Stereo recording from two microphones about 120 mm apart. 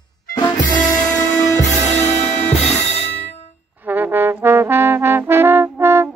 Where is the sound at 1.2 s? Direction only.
30° left (ahead or behind).